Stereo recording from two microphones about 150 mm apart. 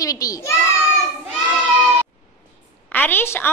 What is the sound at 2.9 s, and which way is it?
Speech, 15° left (ahead or behind).